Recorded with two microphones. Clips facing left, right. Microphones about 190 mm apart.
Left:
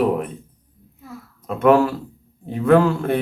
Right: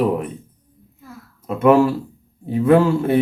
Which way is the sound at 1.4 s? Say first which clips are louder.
Right 1 dB; 5° right (ahead or behind).